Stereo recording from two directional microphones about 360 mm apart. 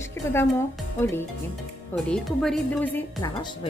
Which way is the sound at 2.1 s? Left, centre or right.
Centre.